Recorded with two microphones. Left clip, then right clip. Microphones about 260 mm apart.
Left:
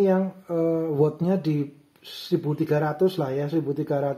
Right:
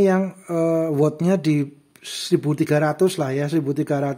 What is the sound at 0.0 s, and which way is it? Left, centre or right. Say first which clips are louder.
Speech: right 3 dB; right.